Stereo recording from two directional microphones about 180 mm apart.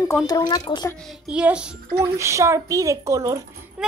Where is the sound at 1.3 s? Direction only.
5° right (ahead or behind).